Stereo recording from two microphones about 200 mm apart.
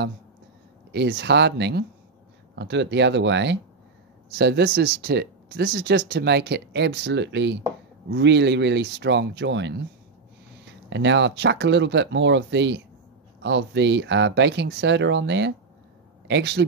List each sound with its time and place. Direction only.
0.9 s speech: 55° right (ahead or behind)